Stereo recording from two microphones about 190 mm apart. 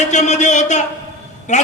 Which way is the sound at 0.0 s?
40° left (ahead or behind).